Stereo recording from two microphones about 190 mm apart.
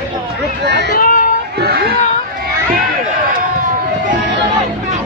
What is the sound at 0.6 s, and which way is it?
Run, 65° right (ahead or behind).